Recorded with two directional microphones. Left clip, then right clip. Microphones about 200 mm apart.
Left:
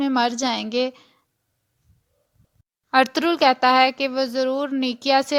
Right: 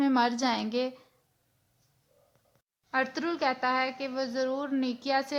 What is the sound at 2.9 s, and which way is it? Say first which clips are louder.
A woman's voice: left 12 dB; 45° left (ahead or behind).